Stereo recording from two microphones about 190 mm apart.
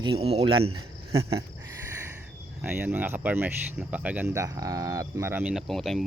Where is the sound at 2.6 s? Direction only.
10° right (ahead or behind).